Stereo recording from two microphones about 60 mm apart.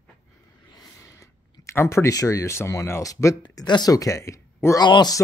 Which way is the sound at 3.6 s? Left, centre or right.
Left.